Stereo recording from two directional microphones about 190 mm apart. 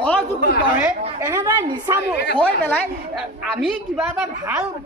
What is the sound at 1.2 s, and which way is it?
Speech, 15° right (ahead or behind).